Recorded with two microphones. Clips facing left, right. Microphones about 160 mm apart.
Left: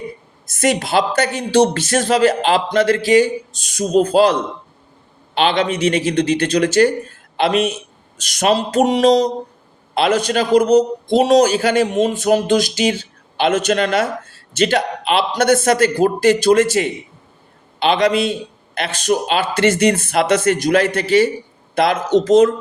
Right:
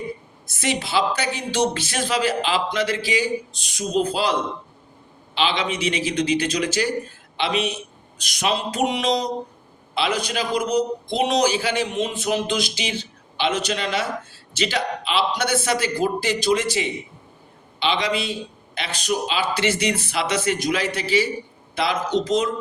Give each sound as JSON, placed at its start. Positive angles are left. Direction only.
{"t": 0.4, "sound": "a man's voice", "side_deg": 45}
{"t": 5.7, "sound": "speech", "side_deg": 40}
{"t": 6.6, "sound": "a man's voice", "side_deg": 60}